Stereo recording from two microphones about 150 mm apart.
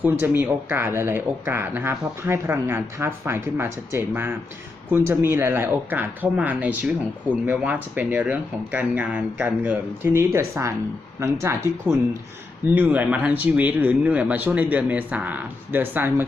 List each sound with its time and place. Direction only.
0.0 s speech: 15° right (ahead or behind)